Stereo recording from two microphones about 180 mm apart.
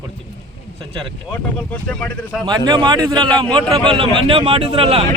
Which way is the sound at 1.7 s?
5° left (ahead or behind).